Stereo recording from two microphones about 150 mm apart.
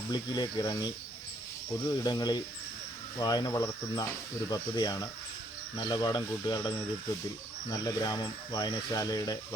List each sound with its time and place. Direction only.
0.1 s speech: 30° left (ahead or behind)